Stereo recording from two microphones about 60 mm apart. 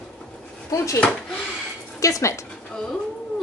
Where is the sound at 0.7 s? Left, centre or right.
Left.